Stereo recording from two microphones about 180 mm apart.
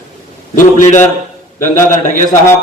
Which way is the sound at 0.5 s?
45° left (ahead or behind).